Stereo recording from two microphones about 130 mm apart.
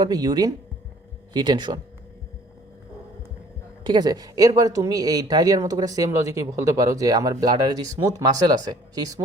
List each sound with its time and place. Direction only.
0.0 s speech: 30° right (ahead or behind)
3.8 s speech: 35° right (ahead or behind)